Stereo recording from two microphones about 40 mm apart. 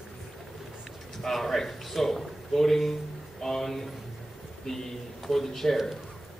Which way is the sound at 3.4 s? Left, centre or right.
Centre.